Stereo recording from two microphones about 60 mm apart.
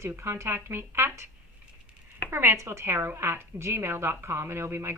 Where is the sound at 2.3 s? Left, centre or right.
Right.